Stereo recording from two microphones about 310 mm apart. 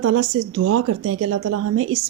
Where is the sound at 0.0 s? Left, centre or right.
Right.